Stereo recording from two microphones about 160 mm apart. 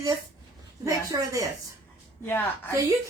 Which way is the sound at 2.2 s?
10° left (ahead or behind).